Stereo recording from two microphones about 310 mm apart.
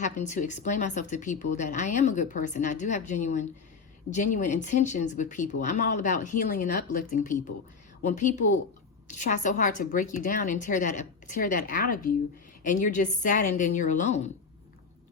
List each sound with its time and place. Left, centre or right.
0.0 s speech: left